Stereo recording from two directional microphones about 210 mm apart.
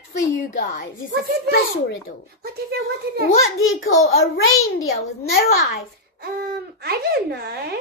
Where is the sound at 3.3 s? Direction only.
75° left (ahead or behind).